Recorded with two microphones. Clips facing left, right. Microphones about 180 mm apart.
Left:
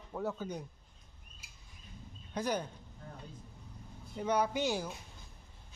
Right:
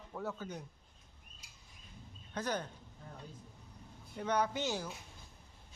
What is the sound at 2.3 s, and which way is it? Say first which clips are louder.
Speech: left 3 dB; 10° left (ahead or behind).